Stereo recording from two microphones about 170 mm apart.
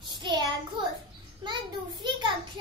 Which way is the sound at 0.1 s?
25° right (ahead or behind).